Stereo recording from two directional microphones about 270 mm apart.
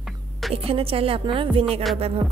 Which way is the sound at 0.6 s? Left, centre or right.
Right.